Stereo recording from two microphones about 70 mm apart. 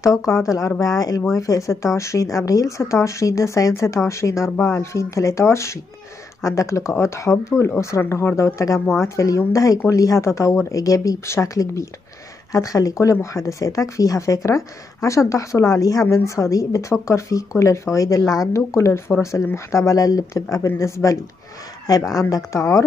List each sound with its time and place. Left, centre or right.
0.0 s speech: left
4.6 s speech: left
4.9 s speech: left
8.0 s speech: left
8.9 s speech: left
21.8 s speech: left